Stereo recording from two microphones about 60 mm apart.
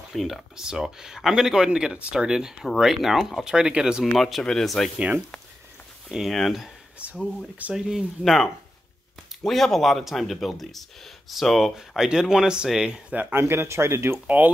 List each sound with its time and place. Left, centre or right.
0.1 s speech: centre
3.5 s speech: centre
4.0 s speech: centre
4.9 s speech: centre
6.0 s speech: centre
7.0 s speech: centre
8.2 s speech: centre
13.1 s speech: right
14.2 s speech: right